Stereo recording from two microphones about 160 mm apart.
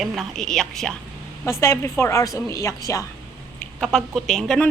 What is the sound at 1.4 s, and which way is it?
A woman's voice, 15° left (ahead or behind).